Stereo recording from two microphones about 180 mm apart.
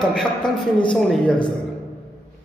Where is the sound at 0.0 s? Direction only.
5° left (ahead or behind).